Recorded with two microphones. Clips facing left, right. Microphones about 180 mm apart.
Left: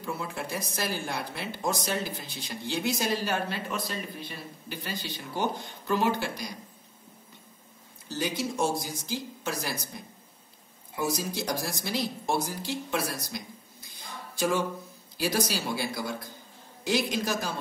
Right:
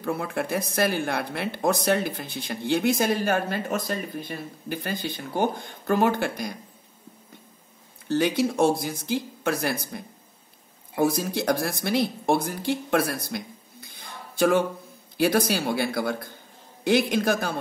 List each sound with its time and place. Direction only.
0.0 s speech: 60° right (ahead or behind)
8.1 s speech: 60° right (ahead or behind)